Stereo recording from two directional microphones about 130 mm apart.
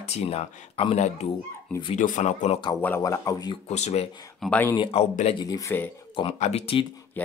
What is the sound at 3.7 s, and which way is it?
Speech, 55° left (ahead or behind).